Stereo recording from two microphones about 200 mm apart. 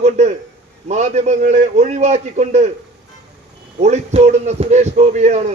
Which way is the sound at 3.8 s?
35° right (ahead or behind).